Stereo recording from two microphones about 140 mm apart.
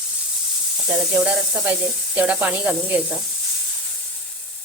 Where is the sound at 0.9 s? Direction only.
10° right (ahead or behind).